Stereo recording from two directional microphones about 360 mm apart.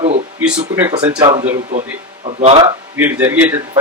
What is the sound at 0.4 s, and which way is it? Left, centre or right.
A man's voice, centre.